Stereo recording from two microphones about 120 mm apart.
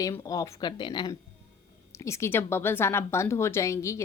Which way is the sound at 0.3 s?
30° left (ahead or behind).